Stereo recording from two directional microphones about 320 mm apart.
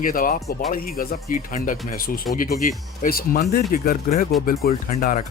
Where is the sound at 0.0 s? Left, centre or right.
Left.